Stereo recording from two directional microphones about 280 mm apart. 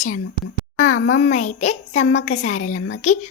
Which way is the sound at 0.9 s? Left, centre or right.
Left.